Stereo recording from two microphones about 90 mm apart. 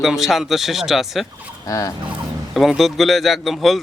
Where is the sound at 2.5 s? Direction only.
Centre (ahead or behind).